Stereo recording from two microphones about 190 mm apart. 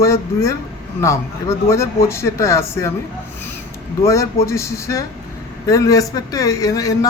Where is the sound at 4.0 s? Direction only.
15° left (ahead or behind).